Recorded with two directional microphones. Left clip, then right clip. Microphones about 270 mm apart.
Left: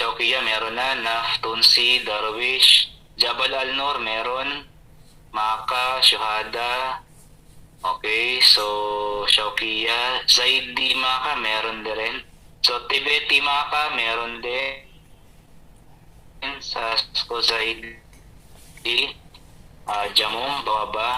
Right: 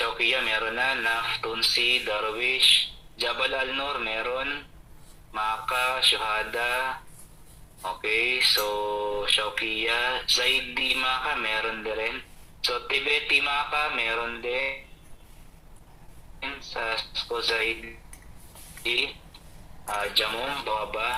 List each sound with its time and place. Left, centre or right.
0.0 s speech: centre
16.4 s speech: centre